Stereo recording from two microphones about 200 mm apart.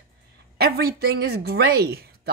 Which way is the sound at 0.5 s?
50° right (ahead or behind).